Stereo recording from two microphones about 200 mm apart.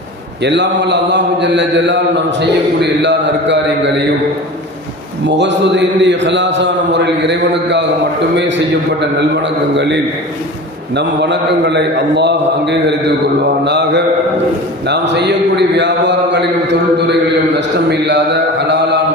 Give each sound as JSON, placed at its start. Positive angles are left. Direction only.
{"t": 0.4, "sound": "speech", "side_deg": -60}
{"t": 5.4, "sound": "speech", "side_deg": -60}
{"t": 9.0, "sound": "speech", "side_deg": -60}
{"t": 17.8, "sound": "speech", "side_deg": -60}